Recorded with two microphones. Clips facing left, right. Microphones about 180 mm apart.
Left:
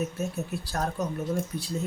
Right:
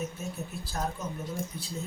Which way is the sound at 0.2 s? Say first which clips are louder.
Left 6 dB; 70° left (ahead or behind).